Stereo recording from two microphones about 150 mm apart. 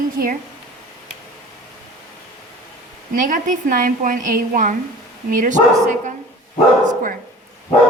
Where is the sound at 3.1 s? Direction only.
60° right (ahead or behind).